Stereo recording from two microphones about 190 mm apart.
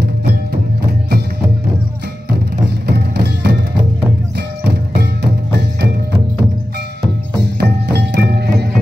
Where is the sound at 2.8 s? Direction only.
60° right (ahead or behind).